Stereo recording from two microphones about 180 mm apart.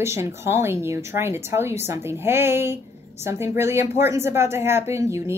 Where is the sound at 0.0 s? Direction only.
15° right (ahead or behind).